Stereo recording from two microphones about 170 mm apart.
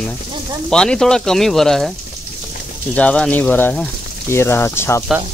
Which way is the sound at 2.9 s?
5° left (ahead or behind).